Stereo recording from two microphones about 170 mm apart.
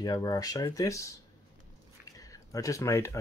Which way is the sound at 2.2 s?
20° left (ahead or behind).